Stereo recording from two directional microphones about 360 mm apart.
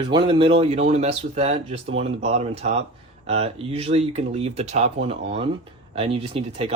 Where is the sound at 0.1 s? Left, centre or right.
Centre.